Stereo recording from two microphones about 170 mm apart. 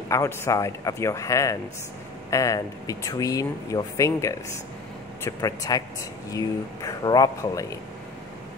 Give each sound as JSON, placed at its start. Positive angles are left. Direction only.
{"t": 0.1, "sound": "speech", "side_deg": 15}